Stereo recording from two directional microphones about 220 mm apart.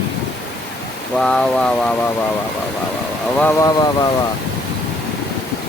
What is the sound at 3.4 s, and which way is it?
Speech, 10° left (ahead or behind).